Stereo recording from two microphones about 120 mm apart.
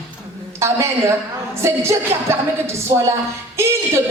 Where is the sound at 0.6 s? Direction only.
25° right (ahead or behind).